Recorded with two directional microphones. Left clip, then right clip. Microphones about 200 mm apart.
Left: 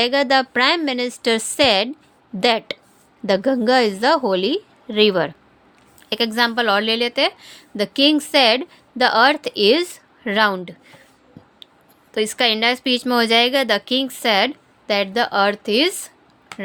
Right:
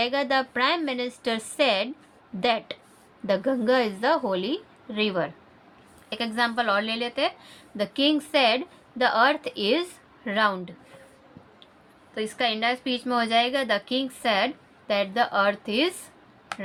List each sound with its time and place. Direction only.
0.0 s a woman's voice: 45° left (ahead or behind)
12.1 s a woman's voice: 55° left (ahead or behind)
16.5 s a sound: 5° right (ahead or behind)